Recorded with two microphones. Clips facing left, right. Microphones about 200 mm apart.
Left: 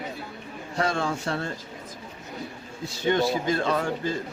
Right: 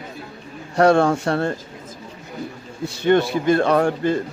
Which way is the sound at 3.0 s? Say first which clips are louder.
Right 7 dB; 60° right (ahead or behind).